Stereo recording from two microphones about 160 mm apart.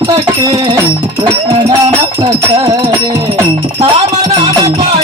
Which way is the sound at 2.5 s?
30° right (ahead or behind).